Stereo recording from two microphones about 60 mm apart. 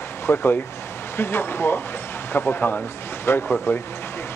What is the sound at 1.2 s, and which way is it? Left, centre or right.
Speech, left.